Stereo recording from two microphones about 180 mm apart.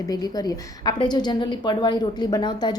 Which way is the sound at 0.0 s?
20° left (ahead or behind).